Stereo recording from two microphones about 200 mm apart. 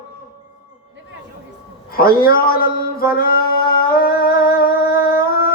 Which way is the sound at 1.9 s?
50° left (ahead or behind).